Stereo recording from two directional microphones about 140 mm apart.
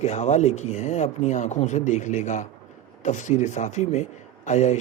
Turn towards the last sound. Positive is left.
turn(degrees=55)  # may be behind; listen again after turning